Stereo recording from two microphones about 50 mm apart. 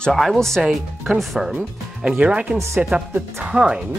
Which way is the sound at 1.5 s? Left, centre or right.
Centre.